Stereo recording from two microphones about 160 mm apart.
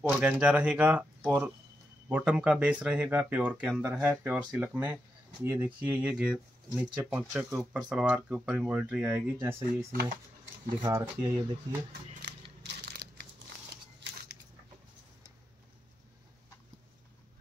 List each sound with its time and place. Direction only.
0.0 s speech: 10° right (ahead or behind)
12.2 s scissors: 90° right
13.9 s biting: 90° right